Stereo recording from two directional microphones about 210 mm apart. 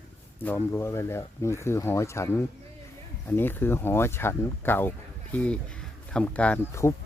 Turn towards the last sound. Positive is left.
turn(degrees=15)  # may be behind; listen again after turning